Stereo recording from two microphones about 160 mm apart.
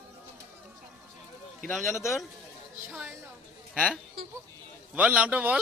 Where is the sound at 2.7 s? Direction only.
10° right (ahead or behind).